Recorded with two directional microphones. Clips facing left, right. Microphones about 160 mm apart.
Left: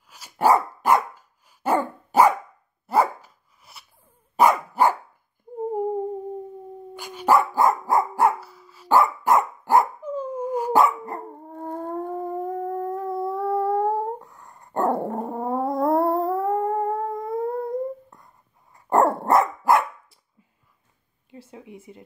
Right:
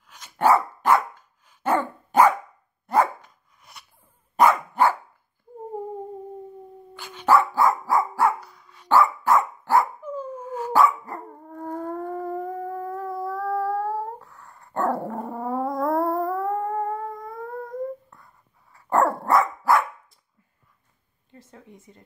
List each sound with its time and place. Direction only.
0.1 s dog: 10° left (ahead or behind)
7.0 s dog: 10° left (ahead or behind)
8.4 s dog: 5° left (ahead or behind)
8.9 s dog: 15° left (ahead or behind)
15.2 s cat: 25° left (ahead or behind)
18.1 s dog: 20° left (ahead or behind)
21.3 s a sound: 15° left (ahead or behind)